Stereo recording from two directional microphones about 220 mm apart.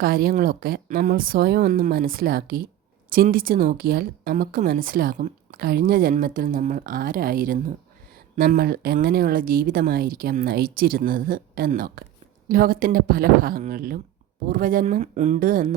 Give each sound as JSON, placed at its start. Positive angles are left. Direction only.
{"t": 0.0, "sound": "a woman's voice", "side_deg": -40}